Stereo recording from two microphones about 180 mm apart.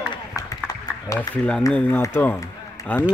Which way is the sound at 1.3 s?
5° left (ahead or behind).